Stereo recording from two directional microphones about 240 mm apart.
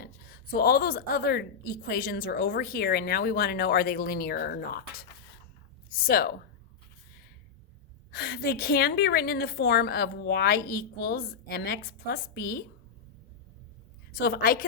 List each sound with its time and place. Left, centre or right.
0.0 s a woman's voice: left
8.1 s a woman's voice: left
14.2 s a woman's voice: left